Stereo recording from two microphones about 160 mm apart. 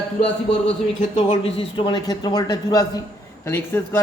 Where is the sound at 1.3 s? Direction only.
35° left (ahead or behind).